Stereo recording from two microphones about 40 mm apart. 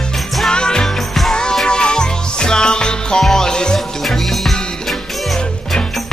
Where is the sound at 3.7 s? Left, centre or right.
Centre.